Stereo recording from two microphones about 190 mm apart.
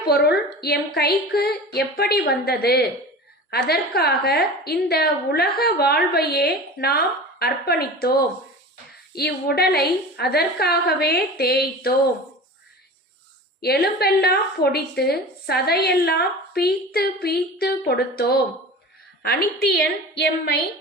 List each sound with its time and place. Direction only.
0.1 s a woman's voice: 55° left (ahead or behind)
9.1 s a woman's voice: 55° left (ahead or behind)
13.6 s a woman's voice: 55° left (ahead or behind)